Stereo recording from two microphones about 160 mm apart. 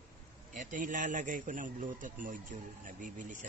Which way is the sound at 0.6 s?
55° right (ahead or behind).